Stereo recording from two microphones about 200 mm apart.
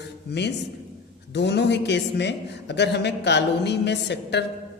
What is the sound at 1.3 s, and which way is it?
A woman's voice, 60° left (ahead or behind).